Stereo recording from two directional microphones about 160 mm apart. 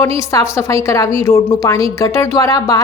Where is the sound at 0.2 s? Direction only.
20° left (ahead or behind).